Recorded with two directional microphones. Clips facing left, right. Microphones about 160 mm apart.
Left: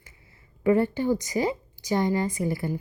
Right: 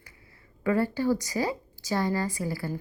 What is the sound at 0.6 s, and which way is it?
A woman's voice, 20° left (ahead or behind).